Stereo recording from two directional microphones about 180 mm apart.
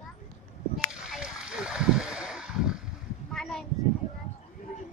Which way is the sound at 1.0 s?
5° right (ahead or behind).